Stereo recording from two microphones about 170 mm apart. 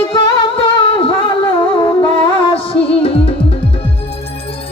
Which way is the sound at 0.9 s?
30° left (ahead or behind).